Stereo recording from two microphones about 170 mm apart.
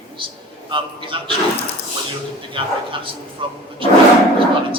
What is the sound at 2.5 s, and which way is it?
A man's voice, 30° right (ahead or behind).